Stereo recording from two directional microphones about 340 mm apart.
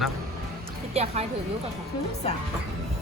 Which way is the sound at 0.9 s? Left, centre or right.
Centre.